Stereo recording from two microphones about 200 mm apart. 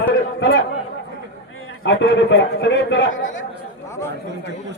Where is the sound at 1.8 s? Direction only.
60° left (ahead or behind).